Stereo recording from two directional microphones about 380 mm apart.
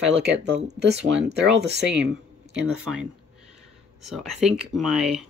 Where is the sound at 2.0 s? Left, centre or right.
Centre.